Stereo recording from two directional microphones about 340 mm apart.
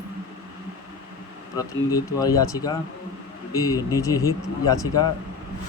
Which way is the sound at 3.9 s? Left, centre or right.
Centre.